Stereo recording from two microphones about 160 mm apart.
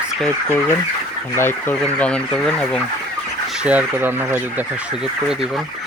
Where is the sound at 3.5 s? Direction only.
10° right (ahead or behind).